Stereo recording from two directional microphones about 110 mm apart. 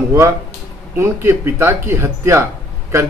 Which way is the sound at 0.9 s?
20° right (ahead or behind).